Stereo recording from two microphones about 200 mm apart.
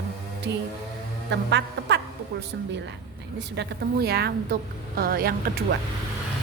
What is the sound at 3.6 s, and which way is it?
A woman's voice, 50° right (ahead or behind).